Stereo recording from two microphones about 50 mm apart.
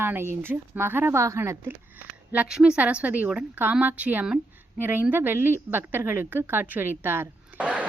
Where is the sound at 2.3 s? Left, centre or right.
Right.